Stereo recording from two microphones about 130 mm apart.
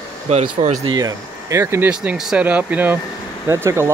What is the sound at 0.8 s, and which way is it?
Speech, 30° right (ahead or behind).